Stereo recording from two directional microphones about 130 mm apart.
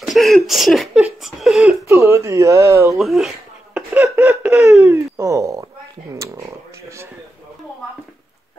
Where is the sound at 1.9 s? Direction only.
20° right (ahead or behind).